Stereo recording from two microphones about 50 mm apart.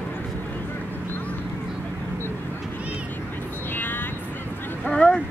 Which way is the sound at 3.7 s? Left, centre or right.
Left.